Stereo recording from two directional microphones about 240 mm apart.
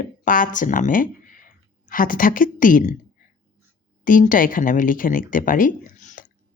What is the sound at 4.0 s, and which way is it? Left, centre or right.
Speech, left.